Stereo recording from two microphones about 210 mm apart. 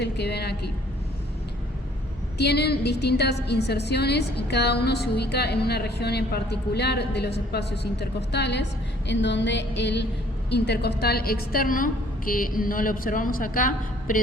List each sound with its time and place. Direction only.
0.0 s a woman's voice: 50° left (ahead or behind)
2.4 s a woman's voice: 50° left (ahead or behind)
9.0 s music: 60° left (ahead or behind)
10.5 s a woman's voice: 50° left (ahead or behind)